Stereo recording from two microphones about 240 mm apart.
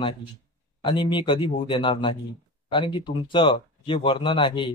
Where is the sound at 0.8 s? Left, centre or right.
Centre.